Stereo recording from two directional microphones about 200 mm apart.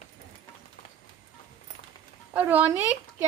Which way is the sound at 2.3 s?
10° right (ahead or behind).